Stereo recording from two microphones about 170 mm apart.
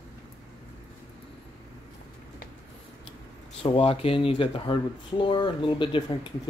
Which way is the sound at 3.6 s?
35° left (ahead or behind).